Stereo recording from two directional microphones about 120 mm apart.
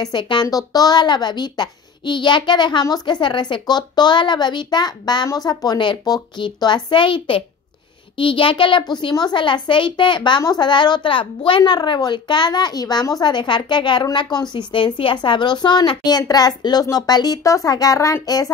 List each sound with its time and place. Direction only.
0.0 s a child's voice: 40° left (ahead or behind)